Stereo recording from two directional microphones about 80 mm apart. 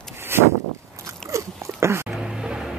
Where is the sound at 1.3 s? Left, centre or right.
Right.